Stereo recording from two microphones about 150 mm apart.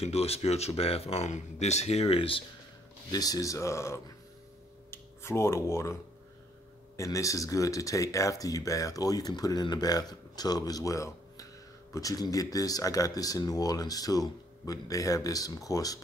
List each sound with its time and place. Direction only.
0.0 s speech: 45° left (ahead or behind)
3.1 s speech: 25° left (ahead or behind)
7.0 s speech: 20° left (ahead or behind)